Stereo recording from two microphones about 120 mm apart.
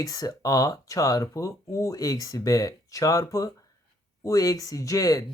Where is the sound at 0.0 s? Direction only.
30° left (ahead or behind).